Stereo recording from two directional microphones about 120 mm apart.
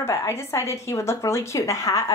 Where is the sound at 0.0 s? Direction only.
20° left (ahead or behind).